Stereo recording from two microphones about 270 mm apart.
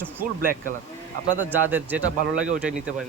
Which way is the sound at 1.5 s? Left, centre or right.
Centre.